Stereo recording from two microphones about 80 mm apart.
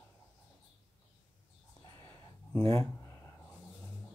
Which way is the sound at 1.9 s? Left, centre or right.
Left.